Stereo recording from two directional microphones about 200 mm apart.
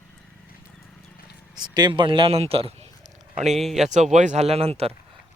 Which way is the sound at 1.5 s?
20° right (ahead or behind).